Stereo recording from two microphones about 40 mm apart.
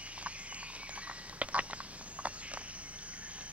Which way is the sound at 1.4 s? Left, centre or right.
Right.